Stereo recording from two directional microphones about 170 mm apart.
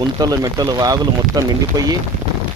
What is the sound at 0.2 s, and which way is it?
Speech, 20° right (ahead or behind).